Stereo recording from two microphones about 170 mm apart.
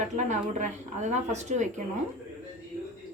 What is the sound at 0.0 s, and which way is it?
Speech, 45° right (ahead or behind).